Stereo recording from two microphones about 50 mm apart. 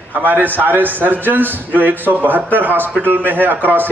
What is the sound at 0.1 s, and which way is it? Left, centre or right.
A man's voice, right.